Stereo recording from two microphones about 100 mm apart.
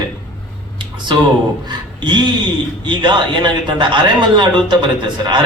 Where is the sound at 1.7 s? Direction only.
50° right (ahead or behind).